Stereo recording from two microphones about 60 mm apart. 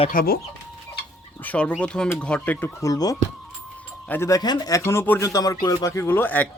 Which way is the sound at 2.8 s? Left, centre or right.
Left.